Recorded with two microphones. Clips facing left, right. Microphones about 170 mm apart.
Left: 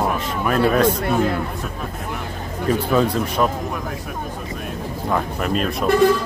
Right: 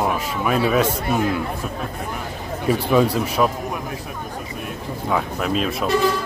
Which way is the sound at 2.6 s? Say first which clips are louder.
Right 1 dB; 10° right (ahead or behind).